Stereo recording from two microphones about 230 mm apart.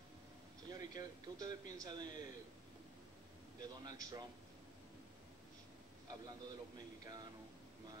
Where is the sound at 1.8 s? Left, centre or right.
Centre.